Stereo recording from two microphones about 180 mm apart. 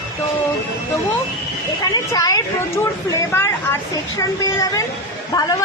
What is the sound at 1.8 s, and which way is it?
A woman's voice, 20° left (ahead or behind).